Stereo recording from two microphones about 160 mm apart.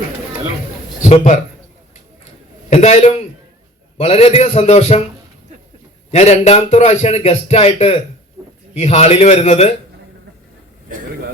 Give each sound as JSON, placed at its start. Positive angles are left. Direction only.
{"t": 1.0, "sound": "speech", "side_deg": 50}
{"t": 2.6, "sound": "a man's voice", "side_deg": 45}
{"t": 6.1, "sound": "a man's voice", "side_deg": 45}